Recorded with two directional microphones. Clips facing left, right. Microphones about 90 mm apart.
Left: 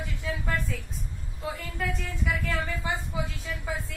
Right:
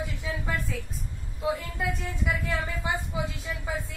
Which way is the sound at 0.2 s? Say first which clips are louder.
Left 4 dB; 5° right (ahead or behind).